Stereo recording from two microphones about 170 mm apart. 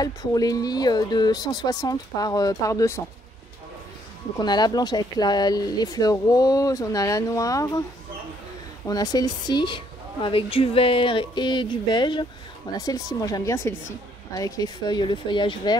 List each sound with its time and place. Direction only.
0.0 s a woman's voice: 20° left (ahead or behind)
4.4 s a woman's voice: 25° left (ahead or behind)
8.8 s a woman's voice: 20° left (ahead or behind)